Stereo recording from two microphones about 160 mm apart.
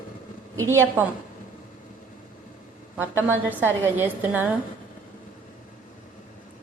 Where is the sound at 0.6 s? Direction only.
15° right (ahead or behind).